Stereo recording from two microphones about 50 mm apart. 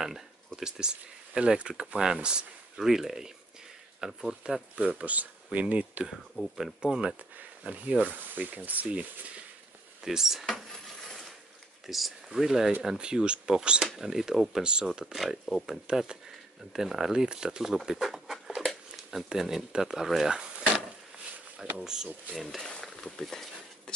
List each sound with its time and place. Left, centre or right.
0.6 s speech: centre
4.8 s speech: right
8.0 s speech: right
10.0 s speech: centre
11.8 s speech: centre
14.5 s speech: centre
15.1 s speech: centre
15.9 s speech: centre
22.6 s speech: centre